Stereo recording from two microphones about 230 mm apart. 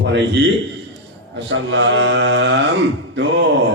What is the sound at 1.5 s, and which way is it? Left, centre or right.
A man's voice, right.